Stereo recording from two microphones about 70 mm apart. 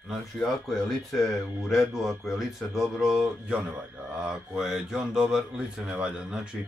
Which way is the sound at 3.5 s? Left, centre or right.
Centre.